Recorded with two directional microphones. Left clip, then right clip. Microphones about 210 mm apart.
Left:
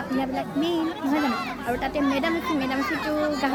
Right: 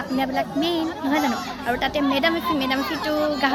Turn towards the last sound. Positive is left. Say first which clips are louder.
# right 3 dB
turn(degrees=0)  # may be behind; listen again after turning